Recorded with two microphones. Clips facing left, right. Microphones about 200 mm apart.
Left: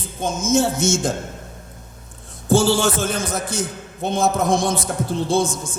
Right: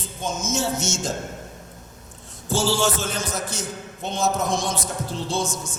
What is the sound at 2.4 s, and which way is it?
A man's voice, 55° left (ahead or behind).